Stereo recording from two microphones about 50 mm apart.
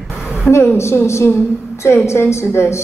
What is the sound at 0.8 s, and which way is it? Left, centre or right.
Speech, left.